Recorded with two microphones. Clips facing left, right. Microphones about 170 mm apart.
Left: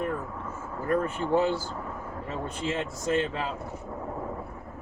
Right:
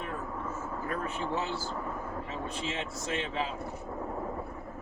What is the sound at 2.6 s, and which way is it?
Speech, 50° left (ahead or behind).